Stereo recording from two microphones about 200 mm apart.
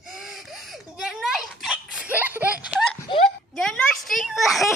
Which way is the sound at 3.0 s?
30° left (ahead or behind).